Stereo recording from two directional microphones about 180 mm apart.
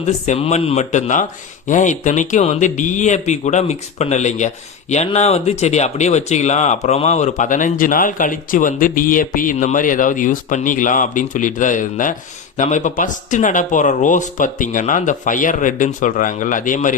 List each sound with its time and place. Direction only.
0.3 s speech: 40° left (ahead or behind)